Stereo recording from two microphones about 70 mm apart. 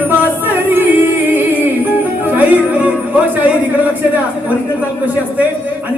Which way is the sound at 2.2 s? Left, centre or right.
Right.